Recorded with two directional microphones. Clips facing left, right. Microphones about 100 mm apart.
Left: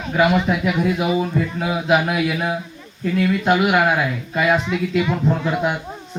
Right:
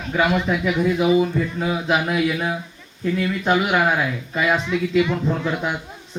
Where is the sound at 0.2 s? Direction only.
5° left (ahead or behind).